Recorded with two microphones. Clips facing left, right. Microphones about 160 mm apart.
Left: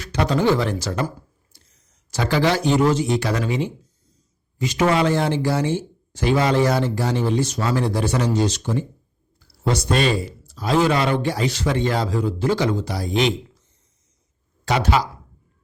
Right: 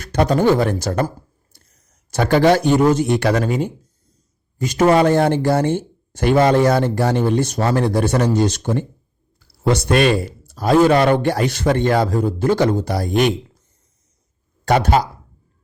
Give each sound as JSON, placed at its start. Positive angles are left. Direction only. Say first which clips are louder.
{"t": 0.0, "sound": "a man's voice", "louder": "right 4 dB", "side_deg": -50}
{"t": 14.6, "sound": "speech", "louder": "right 4 dB", "side_deg": -50}